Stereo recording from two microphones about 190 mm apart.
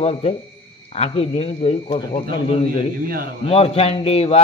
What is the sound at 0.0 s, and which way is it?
Speech, 35° left (ahead or behind).